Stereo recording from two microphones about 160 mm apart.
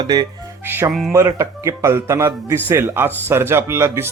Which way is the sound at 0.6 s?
15° right (ahead or behind).